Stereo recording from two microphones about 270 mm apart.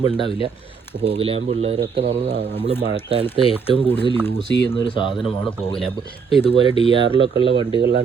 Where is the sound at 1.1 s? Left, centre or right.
Right.